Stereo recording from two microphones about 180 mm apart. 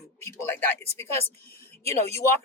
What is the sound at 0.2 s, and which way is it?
Speech, 15° left (ahead or behind).